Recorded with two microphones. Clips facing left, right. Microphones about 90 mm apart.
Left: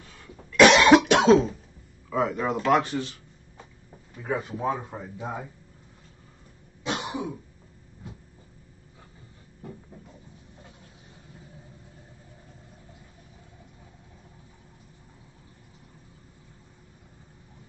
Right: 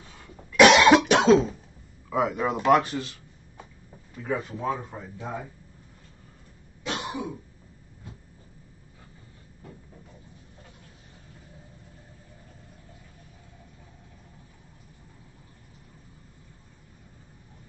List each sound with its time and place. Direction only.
0.5 s cough: 5° right (ahead or behind)
2.0 s speech: 5° right (ahead or behind)
2.7 s speech: centre (ahead or behind)
4.3 s speech: 15° left (ahead or behind)
6.8 s throat clearing: 20° left (ahead or behind)